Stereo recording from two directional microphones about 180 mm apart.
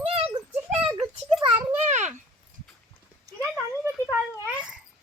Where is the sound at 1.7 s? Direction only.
40° right (ahead or behind).